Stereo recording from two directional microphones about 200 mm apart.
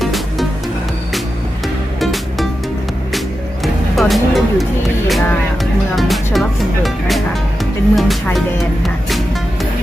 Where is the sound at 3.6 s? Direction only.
Centre (ahead or behind).